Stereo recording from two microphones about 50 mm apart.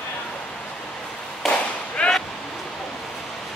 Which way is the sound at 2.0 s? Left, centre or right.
Left.